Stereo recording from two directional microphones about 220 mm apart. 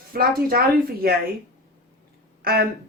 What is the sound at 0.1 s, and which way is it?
Speech, 40° right (ahead or behind).